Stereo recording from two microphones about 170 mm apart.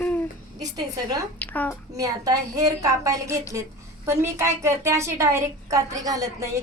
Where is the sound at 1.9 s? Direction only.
20° right (ahead or behind).